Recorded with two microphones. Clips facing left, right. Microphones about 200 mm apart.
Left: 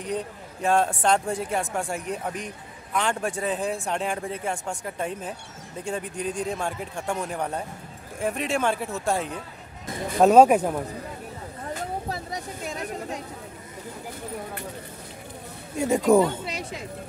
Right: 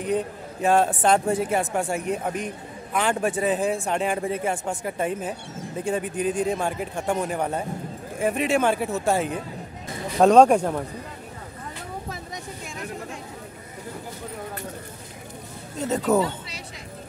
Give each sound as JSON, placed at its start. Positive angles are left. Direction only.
{"t": 0.0, "sound": "speech", "side_deg": -5}
{"t": 10.2, "sound": "speech", "side_deg": 5}
{"t": 11.7, "sound": "vehicle", "side_deg": 35}
{"t": 15.8, "sound": "speech", "side_deg": 10}
{"t": 16.4, "sound": "a sound", "side_deg": 55}